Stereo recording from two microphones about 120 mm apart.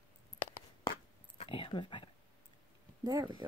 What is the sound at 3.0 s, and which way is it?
Speech, 30° right (ahead or behind).